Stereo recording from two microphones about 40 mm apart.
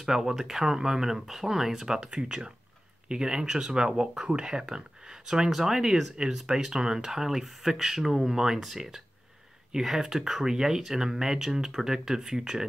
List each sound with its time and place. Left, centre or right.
0.0 s speech: centre